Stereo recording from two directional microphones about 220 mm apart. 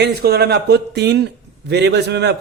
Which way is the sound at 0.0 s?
45° right (ahead or behind).